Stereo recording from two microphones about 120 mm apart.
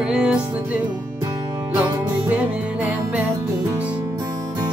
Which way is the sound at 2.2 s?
15° right (ahead or behind).